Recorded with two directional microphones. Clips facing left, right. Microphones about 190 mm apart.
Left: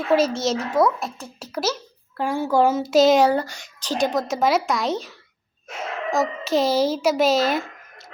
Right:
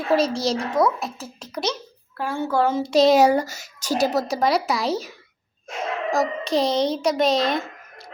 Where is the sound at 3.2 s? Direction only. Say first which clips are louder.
Right 1 dB; 10° right (ahead or behind); by 7.6 s 5° left (ahead or behind).